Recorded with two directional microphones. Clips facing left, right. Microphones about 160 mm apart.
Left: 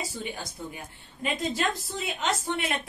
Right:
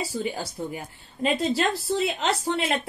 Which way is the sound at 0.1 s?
35° right (ahead or behind).